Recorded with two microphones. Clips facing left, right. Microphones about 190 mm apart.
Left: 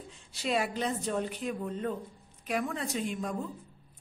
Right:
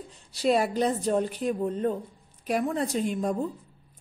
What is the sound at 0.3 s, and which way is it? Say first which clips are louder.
A woman's voice: right 7 dB; 40° right (ahead or behind).